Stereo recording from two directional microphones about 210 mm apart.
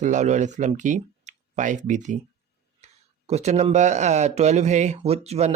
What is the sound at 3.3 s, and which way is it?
Speech, 30° right (ahead or behind).